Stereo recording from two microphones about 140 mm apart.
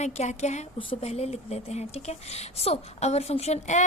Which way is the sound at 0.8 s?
45° left (ahead or behind).